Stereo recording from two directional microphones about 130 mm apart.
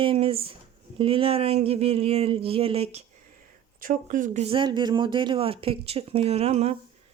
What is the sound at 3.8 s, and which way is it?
Speech, 90° right.